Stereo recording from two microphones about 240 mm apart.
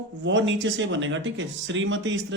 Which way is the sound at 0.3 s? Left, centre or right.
Right.